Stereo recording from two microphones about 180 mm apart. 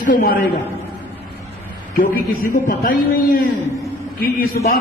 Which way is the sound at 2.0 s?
50° left (ahead or behind).